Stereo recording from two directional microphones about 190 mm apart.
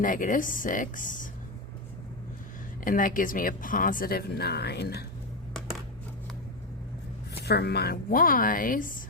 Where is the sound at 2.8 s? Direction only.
45° left (ahead or behind).